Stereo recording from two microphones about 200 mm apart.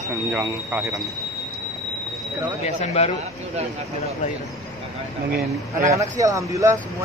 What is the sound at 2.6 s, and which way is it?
Speech, 30° left (ahead or behind).